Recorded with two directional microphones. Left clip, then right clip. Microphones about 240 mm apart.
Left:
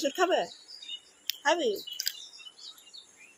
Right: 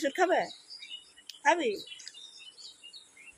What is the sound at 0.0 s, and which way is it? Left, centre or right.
A woman's voice, centre.